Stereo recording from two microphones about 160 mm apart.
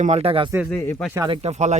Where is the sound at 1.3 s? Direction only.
45° right (ahead or behind).